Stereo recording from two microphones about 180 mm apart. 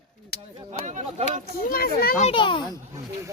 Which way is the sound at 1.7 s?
55° left (ahead or behind).